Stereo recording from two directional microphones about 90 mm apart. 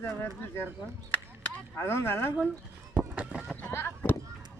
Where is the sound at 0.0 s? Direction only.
25° left (ahead or behind).